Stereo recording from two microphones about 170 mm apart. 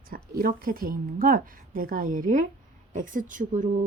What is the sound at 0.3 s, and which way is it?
A woman's voice, 55° right (ahead or behind).